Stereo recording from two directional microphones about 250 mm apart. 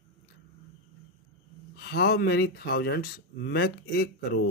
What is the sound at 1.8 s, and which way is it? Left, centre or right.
Speech, left.